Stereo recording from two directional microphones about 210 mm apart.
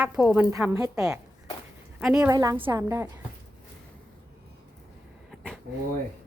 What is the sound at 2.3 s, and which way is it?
Speech, 15° right (ahead or behind).